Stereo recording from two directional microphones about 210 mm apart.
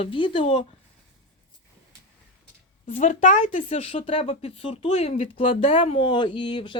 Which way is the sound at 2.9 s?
35° left (ahead or behind).